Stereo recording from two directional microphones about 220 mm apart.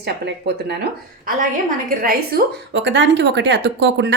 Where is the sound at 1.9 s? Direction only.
45° right (ahead or behind).